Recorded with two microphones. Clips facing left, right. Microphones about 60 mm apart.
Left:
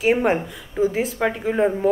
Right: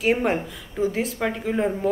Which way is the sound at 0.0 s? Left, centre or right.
Centre.